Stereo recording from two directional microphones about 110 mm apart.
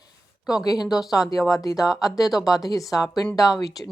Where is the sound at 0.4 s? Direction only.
35° left (ahead or behind).